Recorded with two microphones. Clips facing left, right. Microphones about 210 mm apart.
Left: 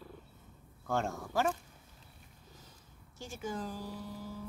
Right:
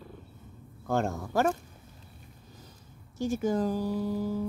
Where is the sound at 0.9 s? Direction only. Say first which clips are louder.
Right 5 dB; 40° right (ahead or behind).